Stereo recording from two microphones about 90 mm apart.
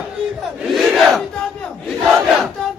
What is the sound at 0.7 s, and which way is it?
Battle cry, centre (ahead or behind).